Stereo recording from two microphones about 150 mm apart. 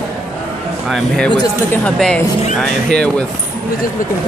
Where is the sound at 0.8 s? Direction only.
5° left (ahead or behind).